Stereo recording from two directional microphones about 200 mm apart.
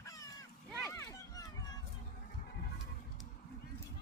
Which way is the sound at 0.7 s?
10° left (ahead or behind).